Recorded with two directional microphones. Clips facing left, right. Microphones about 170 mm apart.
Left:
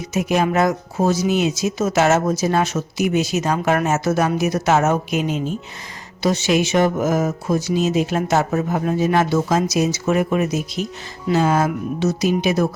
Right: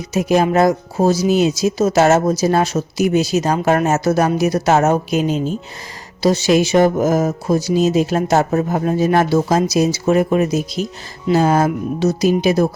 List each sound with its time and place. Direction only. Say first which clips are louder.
0.0 s speech: right 4 dB; 35° right (ahead or behind)